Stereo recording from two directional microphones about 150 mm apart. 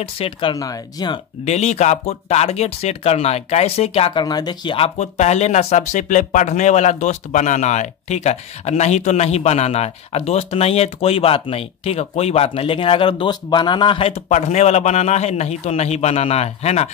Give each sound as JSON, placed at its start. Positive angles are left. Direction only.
{"t": 0.0, "sound": "speech", "side_deg": 40}
{"t": 1.4, "sound": "speech", "side_deg": 45}